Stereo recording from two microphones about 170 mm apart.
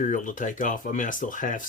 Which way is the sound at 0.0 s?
50° left (ahead or behind).